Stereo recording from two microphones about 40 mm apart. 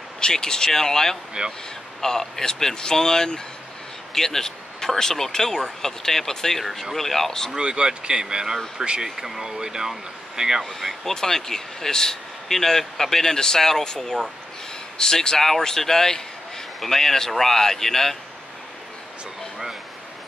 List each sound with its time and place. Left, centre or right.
0.2 s speech: centre
1.4 s speech: right
2.0 s speech: centre
7.5 s speech: right
9.0 s speech: centre
10.6 s speech: centre